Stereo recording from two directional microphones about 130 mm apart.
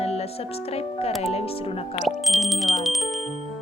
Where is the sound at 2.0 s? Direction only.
Centre (ahead or behind).